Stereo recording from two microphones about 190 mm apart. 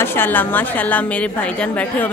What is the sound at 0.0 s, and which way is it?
A woman's voice, 10° left (ahead or behind).